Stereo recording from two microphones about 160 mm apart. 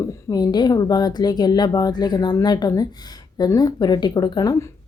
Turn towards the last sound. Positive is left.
turn(degrees=20)  # may be behind; listen again after turning